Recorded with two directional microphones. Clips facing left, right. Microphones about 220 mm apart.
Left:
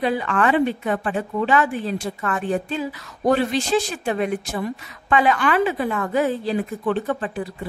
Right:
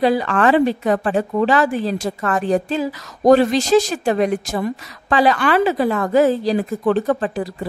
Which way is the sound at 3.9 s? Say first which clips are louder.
Right 5 dB; 40° right (ahead or behind).